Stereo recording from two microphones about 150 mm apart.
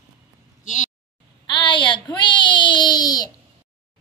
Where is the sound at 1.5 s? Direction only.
30° left (ahead or behind).